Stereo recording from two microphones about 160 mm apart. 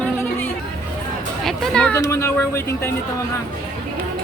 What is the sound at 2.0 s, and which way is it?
Speech, 15° left (ahead or behind).